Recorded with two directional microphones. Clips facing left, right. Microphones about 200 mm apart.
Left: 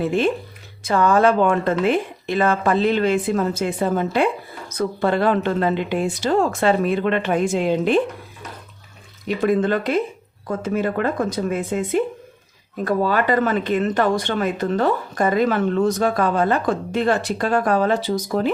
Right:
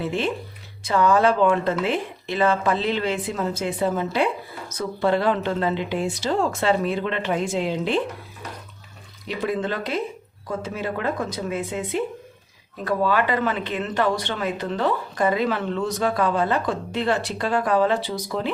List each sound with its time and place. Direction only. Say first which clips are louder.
0.0 s speech: left 5 dB; 50° left (ahead or behind)
9.2 s speech: left 7 dB; 50° left (ahead or behind)
12.8 s speech: left 2 dB; 45° left (ahead or behind)